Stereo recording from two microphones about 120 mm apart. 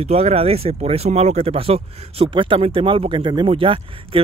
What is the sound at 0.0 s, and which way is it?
Speech, 60° right (ahead or behind).